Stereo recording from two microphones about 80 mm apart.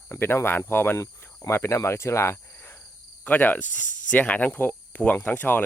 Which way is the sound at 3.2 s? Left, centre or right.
Left.